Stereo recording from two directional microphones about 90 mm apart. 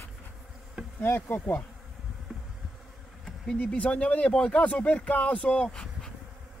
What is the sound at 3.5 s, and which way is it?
Speech, 15° left (ahead or behind).